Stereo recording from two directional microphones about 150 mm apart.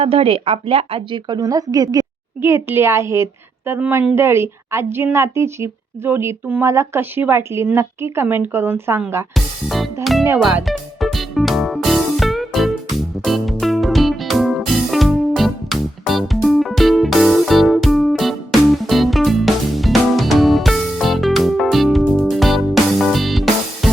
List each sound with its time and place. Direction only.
0.0 s a woman's voice: 40° right (ahead or behind); by 9.2 s 15° right (ahead or behind)
9.3 s music: centre (ahead or behind)